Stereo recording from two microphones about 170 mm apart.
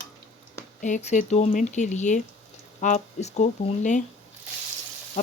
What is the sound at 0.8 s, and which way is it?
Speech, 45° left (ahead or behind).